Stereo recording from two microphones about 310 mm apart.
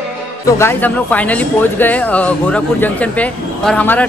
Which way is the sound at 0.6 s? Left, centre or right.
Centre.